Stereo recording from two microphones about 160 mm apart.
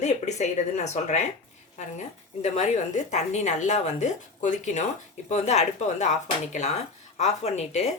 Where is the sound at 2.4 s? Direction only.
45° left (ahead or behind).